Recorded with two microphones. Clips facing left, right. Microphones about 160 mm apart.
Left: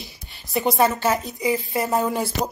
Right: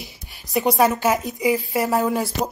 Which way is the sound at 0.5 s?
Centre (ahead or behind).